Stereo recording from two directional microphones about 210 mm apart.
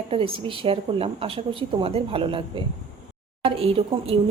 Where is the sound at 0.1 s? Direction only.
25° right (ahead or behind).